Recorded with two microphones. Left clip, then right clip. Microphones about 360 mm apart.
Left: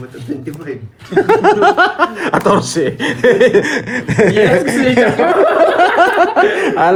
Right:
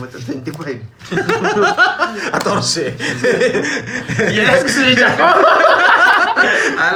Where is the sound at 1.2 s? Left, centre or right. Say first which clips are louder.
Left 5 dB; centre.